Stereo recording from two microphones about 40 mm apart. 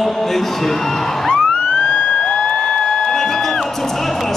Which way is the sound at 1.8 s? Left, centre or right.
Centre.